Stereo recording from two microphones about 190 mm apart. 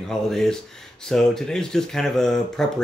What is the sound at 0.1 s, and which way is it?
Speech, centre (ahead or behind).